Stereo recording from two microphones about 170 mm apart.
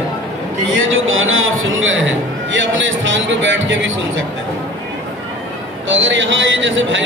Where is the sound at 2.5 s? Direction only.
90° right.